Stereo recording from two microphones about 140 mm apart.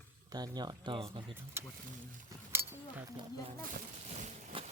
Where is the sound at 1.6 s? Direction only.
20° right (ahead or behind).